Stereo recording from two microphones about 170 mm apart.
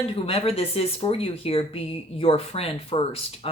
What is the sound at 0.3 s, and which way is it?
Speech, 35° left (ahead or behind).